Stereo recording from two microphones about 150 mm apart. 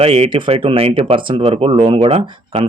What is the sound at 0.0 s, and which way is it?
Speech, 40° right (ahead or behind).